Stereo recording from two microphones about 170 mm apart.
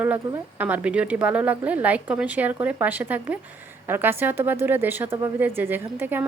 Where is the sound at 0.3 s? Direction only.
10° right (ahead or behind).